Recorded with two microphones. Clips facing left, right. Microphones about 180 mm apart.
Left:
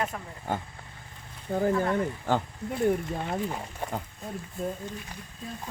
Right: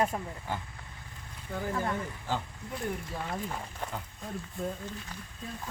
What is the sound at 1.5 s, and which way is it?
Speech, 40° left (ahead or behind).